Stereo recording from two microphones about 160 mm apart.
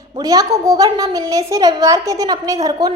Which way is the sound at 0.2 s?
20° right (ahead or behind).